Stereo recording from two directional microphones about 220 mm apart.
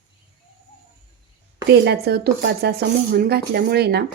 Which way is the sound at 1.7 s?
45° right (ahead or behind).